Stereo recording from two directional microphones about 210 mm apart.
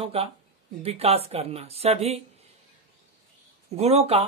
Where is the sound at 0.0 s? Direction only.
30° right (ahead or behind).